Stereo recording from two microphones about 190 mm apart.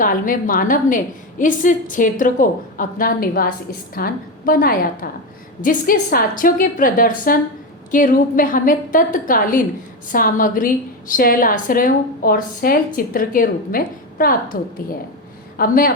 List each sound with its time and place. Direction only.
0.0 s a woman's voice: 45° left (ahead or behind)